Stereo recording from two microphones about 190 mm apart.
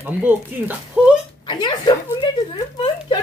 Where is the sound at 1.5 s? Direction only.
25° left (ahead or behind).